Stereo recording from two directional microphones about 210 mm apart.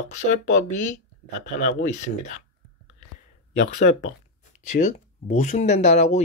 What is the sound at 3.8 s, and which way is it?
Speech, 35° left (ahead or behind).